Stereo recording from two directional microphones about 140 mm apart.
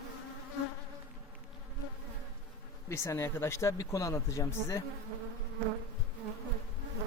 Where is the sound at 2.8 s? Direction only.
20° left (ahead or behind).